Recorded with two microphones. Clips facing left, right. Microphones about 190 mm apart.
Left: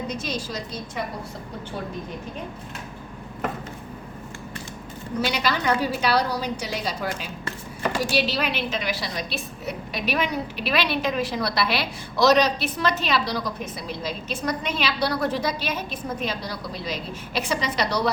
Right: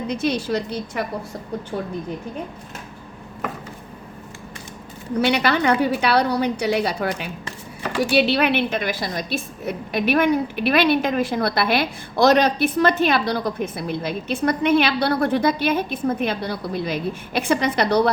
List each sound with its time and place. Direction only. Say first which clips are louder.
0.1 s a woman's voice: right 8 dB; 60° right (ahead or behind)
5.2 s a woman's voice: right 6 dB; 60° right (ahead or behind)